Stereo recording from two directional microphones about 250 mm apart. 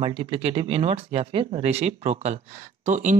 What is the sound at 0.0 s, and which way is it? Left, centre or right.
Speech, right.